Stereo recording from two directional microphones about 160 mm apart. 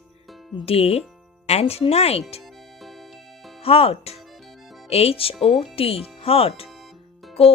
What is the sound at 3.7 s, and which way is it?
Speech, 35° left (ahead or behind).